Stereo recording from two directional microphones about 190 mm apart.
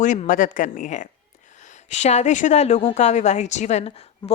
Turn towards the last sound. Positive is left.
turn(degrees=35)  # may be behind; listen again after turning